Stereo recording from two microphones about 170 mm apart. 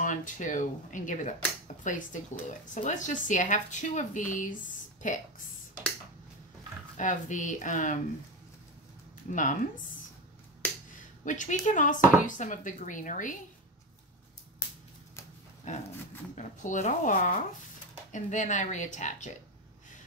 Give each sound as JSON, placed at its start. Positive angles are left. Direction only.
{"t": 0.0, "sound": "speech", "side_deg": 50}
{"t": 7.0, "sound": "speech", "side_deg": 50}
{"t": 9.3, "sound": "speech", "side_deg": 50}
{"t": 11.2, "sound": "speech", "side_deg": 45}
{"t": 15.7, "sound": "speech", "side_deg": 45}